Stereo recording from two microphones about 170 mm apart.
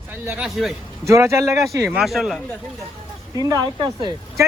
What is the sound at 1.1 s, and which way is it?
Speech, 15° right (ahead or behind).